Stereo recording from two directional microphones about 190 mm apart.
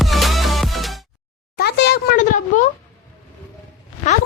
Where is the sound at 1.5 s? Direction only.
60° left (ahead or behind).